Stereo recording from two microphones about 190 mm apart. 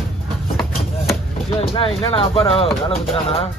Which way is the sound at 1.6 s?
30° left (ahead or behind).